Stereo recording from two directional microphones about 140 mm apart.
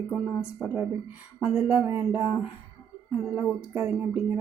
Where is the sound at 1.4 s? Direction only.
5° right (ahead or behind).